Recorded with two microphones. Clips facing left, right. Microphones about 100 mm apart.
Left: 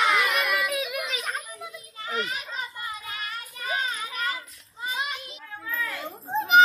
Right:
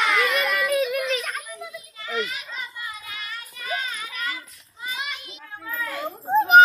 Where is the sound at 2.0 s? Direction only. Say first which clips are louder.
Right 1 dB; 40° left (ahead or behind).